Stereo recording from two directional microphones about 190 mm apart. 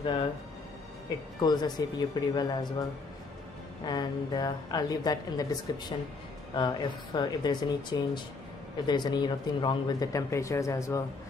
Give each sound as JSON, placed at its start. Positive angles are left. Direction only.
{"t": 0.0, "sound": "speech", "side_deg": 30}
{"t": 1.4, "sound": "speech", "side_deg": 20}
{"t": 3.8, "sound": "speech", "side_deg": 20}